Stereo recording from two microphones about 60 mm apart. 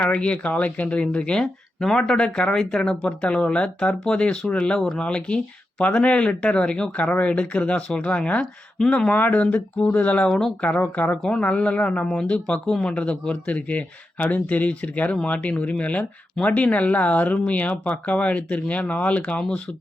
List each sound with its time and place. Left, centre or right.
0.0 s speech: left
10.2 s speech: centre
10.8 s speech: left
12.6 s speech: centre
12.9 s speech: centre